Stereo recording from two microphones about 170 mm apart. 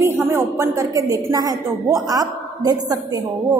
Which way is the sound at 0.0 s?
15° right (ahead or behind).